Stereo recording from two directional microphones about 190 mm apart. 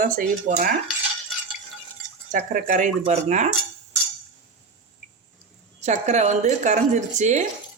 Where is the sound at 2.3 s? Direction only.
45° right (ahead or behind).